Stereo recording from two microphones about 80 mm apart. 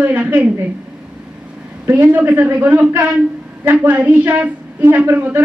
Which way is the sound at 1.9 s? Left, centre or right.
Right.